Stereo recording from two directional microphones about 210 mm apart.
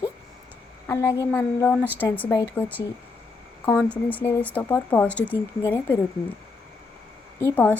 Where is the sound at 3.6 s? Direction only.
5° left (ahead or behind).